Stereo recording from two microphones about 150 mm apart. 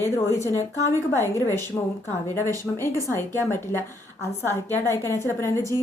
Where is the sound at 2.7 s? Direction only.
15° left (ahead or behind).